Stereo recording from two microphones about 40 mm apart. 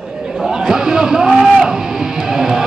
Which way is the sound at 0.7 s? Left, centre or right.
Centre.